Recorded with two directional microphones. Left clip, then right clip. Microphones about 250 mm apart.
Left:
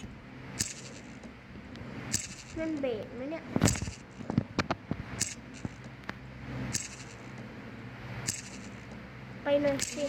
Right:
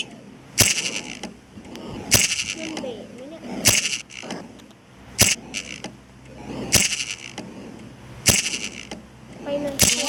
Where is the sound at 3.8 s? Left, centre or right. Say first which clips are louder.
Right 19 dB; right.